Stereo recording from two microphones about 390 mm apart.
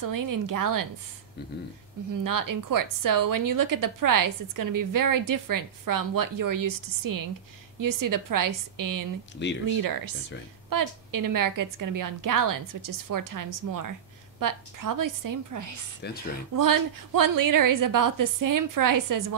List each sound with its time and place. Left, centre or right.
0.0 s a woman's voice: right
2.2 s a woman's voice: right
9.4 s speech: left
9.8 s a woman's voice: right